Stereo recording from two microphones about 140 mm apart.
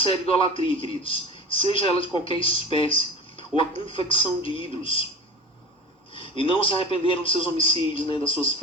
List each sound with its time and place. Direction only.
0.0 s a man's voice: 40° left (ahead or behind)
6.1 s a man's voice: 40° left (ahead or behind)